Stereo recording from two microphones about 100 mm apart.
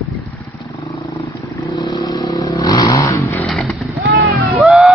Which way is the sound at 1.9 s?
40° left (ahead or behind).